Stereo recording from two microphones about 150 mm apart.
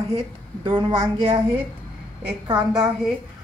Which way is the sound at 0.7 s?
30° right (ahead or behind).